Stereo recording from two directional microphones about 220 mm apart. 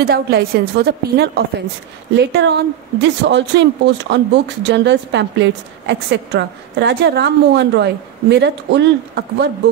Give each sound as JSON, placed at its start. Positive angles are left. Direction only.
{"t": 0.0, "sound": "a woman's voice", "side_deg": -45}